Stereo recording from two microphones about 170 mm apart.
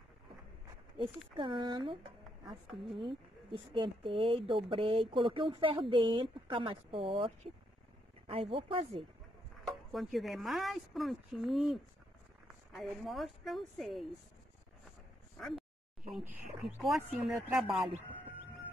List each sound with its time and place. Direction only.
1.3 s speech: 30° right (ahead or behind)
9.7 s speech: centre (ahead or behind)
16.2 s speech: 5° right (ahead or behind)